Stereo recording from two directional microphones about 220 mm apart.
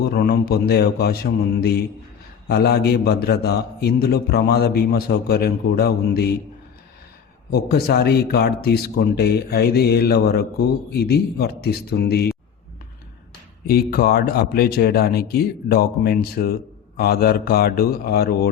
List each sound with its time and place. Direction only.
0.1 s a man's voice: 45° left (ahead or behind)
7.5 s a man's voice: 45° left (ahead or behind)
13.7 s a man's voice: 45° left (ahead or behind)